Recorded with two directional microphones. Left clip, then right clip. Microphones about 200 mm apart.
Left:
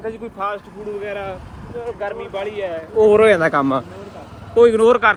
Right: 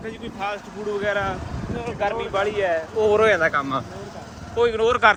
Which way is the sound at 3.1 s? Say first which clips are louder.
Left 5 dB; 20° left (ahead or behind).